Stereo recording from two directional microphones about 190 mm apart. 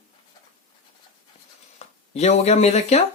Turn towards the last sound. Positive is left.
turn(degrees=35)  # may be behind; listen again after turning